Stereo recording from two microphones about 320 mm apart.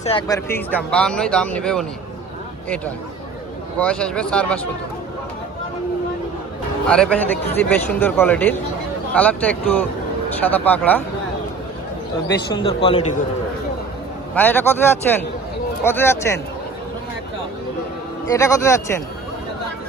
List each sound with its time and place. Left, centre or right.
0.0 s speech: centre
3.8 s speech: centre
6.8 s speech: centre
12.6 s speech: centre
14.3 s speech: centre
18.3 s speech: centre